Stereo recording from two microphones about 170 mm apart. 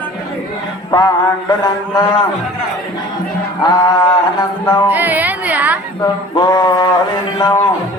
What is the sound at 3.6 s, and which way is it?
Music, 25° left (ahead or behind).